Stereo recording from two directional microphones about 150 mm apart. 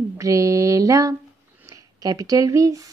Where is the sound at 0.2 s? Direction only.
20° right (ahead or behind).